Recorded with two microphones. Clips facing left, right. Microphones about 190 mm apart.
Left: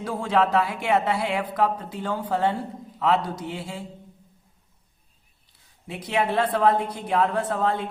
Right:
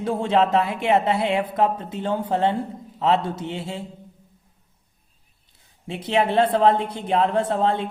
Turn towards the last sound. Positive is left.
turn(degrees=-25)  # may be behind; listen again after turning